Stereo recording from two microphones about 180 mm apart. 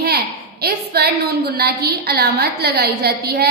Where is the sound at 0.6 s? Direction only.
60° right (ahead or behind).